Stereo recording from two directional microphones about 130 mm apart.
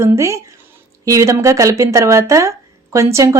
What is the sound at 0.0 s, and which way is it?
Speech, 20° right (ahead or behind).